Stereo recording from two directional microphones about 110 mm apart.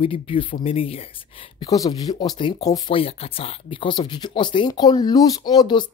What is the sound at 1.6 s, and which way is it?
Speech, 35° left (ahead or behind).